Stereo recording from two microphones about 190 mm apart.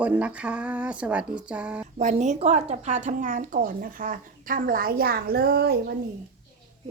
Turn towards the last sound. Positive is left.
turn(degrees=-55)  # may be behind; listen again after turning